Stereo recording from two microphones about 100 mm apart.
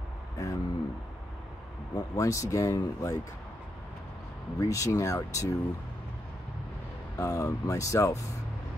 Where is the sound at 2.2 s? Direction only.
35° left (ahead or behind).